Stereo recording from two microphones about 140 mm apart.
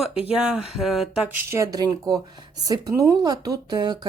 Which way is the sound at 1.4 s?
20° right (ahead or behind).